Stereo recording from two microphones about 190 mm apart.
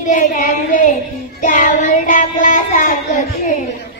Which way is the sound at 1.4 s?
45° left (ahead or behind).